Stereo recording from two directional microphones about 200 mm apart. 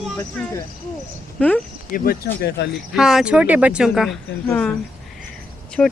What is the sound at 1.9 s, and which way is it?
Speech, 45° left (ahead or behind).